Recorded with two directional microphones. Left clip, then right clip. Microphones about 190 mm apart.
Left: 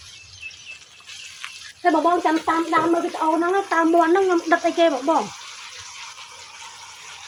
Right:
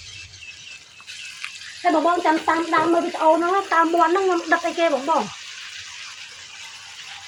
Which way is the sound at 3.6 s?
35° left (ahead or behind).